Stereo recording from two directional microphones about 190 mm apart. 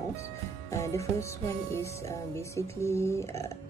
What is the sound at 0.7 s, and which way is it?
Music, 15° left (ahead or behind).